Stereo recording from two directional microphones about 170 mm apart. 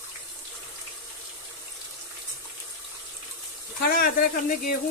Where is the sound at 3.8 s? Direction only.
60° left (ahead or behind).